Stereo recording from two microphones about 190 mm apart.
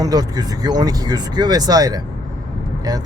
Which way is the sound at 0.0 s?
20° right (ahead or behind).